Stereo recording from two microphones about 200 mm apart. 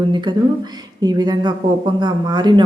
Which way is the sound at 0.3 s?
20° right (ahead or behind).